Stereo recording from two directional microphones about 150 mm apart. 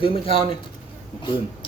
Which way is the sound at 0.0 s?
35° left (ahead or behind).